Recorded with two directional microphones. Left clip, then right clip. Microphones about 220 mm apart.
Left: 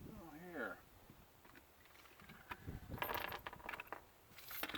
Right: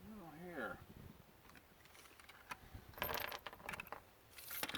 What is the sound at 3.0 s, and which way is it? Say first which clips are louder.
Mechanisms: even; 45° right (ahead or behind).